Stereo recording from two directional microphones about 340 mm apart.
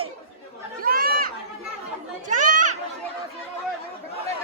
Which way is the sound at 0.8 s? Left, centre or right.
Right.